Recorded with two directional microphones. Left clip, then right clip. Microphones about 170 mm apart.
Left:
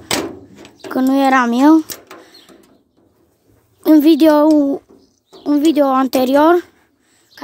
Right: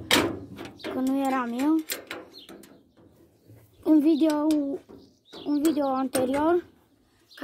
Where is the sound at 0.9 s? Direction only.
55° left (ahead or behind).